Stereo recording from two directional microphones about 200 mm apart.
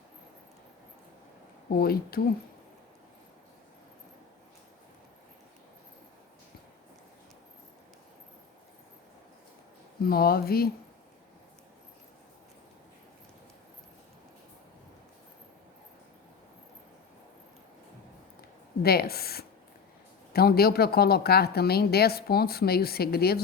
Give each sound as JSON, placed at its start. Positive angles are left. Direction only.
{"t": 1.7, "sound": "a woman's voice", "side_deg": 50}
{"t": 10.0, "sound": "a woman's voice", "side_deg": 50}
{"t": 18.8, "sound": "a woman's voice", "side_deg": 50}